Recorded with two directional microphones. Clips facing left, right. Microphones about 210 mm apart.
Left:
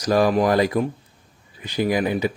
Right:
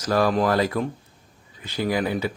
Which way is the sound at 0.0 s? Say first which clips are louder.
Left 3 dB; 15° left (ahead or behind).